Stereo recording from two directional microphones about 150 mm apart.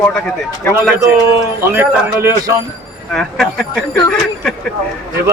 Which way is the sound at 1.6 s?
15° right (ahead or behind).